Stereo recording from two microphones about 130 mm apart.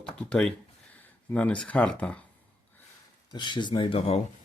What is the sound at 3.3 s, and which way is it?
Speech, 35° left (ahead or behind).